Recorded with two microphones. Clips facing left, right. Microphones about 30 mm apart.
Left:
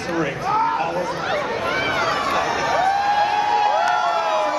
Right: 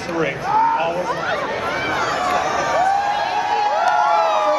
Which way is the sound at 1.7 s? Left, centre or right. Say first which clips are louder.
Left 1 dB; centre.